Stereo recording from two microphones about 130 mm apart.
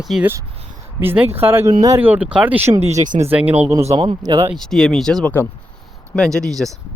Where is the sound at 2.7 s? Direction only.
25° right (ahead or behind).